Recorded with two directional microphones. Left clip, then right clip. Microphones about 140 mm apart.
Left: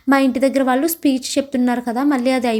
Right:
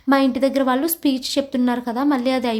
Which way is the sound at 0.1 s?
25° left (ahead or behind).